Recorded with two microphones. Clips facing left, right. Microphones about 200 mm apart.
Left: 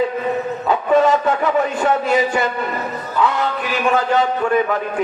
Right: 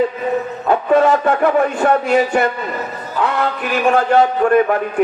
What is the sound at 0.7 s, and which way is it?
A man's voice, 55° right (ahead or behind).